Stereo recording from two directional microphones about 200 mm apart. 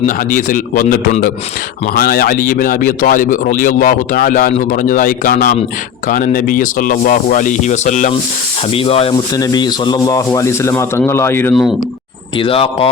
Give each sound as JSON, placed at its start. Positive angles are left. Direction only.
{"t": 0.0, "sound": "a man's voice", "side_deg": 40}
{"t": 11.5, "sound": "speech", "side_deg": 0}
{"t": 12.4, "sound": "speech", "side_deg": 25}